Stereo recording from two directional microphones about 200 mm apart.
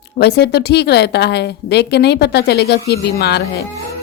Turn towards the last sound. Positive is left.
turn(degrees=55)  # may be behind; listen again after turning